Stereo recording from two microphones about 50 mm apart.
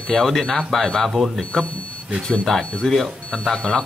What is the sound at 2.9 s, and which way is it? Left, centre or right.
Speech, centre.